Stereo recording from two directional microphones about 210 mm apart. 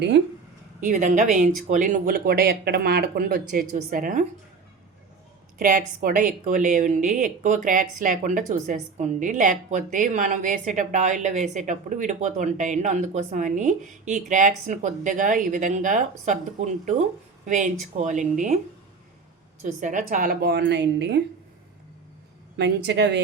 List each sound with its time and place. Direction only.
0.8 s speech: 40° right (ahead or behind)
5.5 s speech: 40° right (ahead or behind)
19.6 s speech: 35° right (ahead or behind); by 21.2 s 55° right (ahead or behind)
22.5 s speech: 55° right (ahead or behind)